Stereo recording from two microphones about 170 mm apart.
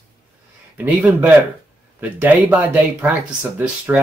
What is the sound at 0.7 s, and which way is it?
Speech, 10° right (ahead or behind).